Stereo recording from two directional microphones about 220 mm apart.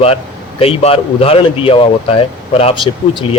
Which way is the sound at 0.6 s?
25° left (ahead or behind).